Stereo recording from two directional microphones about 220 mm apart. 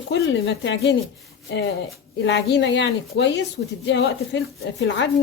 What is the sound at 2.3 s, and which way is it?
A woman's voice, 55° left (ahead or behind).